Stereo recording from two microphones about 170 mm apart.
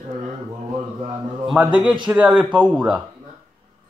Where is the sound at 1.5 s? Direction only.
5° right (ahead or behind).